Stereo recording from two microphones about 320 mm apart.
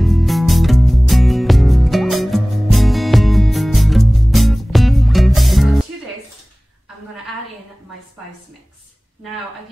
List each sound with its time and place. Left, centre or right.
0.0 s music: centre